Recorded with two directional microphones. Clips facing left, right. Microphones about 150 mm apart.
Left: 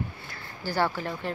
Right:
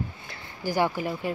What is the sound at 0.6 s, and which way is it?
Speech, 15° right (ahead or behind).